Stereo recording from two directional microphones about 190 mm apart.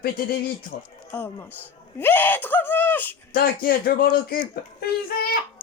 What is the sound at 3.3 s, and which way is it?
Speech, 50° left (ahead or behind).